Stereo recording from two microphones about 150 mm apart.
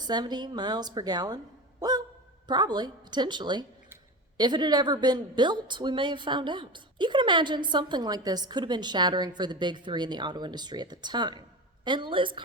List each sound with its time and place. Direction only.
0.0 s speech: 30° right (ahead or behind)
1.8 s a sound: 25° right (ahead or behind)
2.5 s a woman's voice: 30° right (ahead or behind)